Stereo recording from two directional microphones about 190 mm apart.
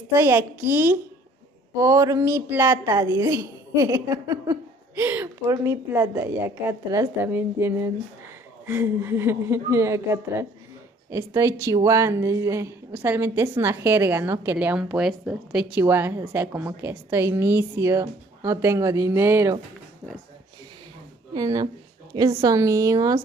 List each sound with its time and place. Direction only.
0.1 s a woman's voice: 10° right (ahead or behind)
21.3 s a woman's voice: 20° right (ahead or behind)